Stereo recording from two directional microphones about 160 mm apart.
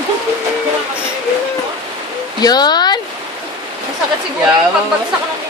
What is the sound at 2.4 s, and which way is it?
Speech, 25° left (ahead or behind).